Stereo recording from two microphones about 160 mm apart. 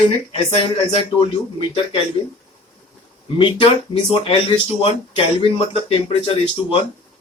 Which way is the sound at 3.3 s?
30° left (ahead or behind).